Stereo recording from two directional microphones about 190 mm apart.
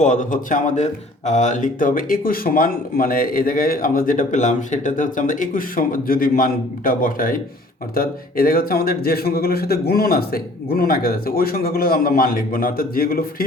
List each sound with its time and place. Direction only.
0.0 s a man's voice: 45° left (ahead or behind)